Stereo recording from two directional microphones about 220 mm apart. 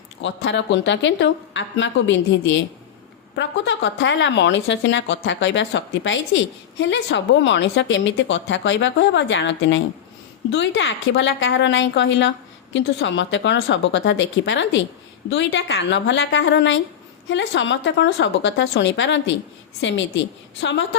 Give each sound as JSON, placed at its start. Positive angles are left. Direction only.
{"t": 0.2, "sound": "a woman's voice", "side_deg": 55}